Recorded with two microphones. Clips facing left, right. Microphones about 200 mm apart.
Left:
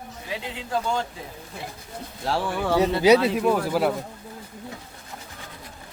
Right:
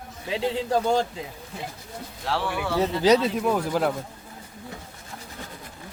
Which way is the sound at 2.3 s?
40° left (ahead or behind).